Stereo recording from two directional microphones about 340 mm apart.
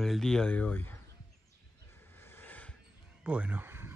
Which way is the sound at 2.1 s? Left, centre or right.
Centre.